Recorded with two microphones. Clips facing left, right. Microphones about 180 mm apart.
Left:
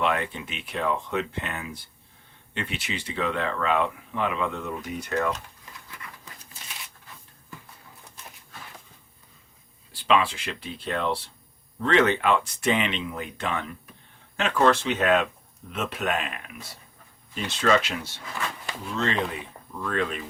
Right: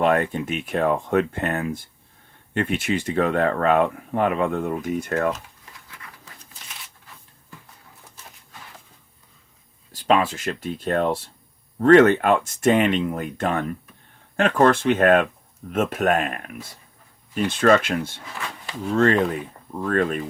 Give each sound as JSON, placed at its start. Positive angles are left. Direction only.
{"t": 0.0, "sound": "speech", "side_deg": -45}
{"t": 9.9, "sound": "speech", "side_deg": -45}